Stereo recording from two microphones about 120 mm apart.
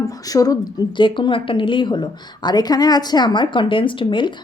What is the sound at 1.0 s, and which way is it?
A woman's voice, 40° left (ahead or behind).